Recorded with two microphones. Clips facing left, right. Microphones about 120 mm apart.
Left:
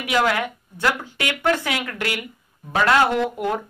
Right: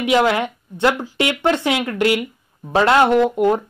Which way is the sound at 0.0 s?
25° right (ahead or behind).